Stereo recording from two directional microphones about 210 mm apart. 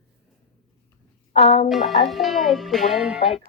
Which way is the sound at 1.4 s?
25° left (ahead or behind).